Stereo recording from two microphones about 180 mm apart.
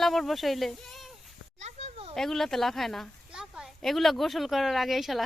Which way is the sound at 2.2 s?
Centre (ahead or behind).